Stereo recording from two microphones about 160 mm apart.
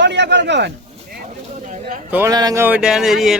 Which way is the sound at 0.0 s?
90° right.